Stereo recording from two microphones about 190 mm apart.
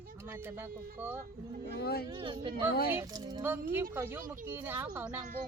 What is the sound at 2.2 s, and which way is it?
Speech, 25° right (ahead or behind).